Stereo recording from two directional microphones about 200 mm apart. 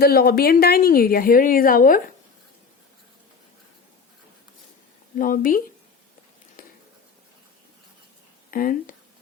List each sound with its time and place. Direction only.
0.0 s a woman's voice: 50° left (ahead or behind)
5.1 s a woman's voice: 40° left (ahead or behind)
8.4 s speech: 45° left (ahead or behind)